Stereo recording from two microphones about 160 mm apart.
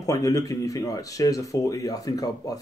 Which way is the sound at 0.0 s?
20° left (ahead or behind).